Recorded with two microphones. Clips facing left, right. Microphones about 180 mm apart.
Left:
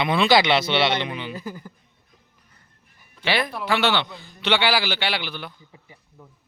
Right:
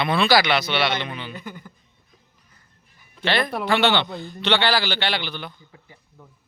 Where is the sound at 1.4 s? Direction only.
35° left (ahead or behind).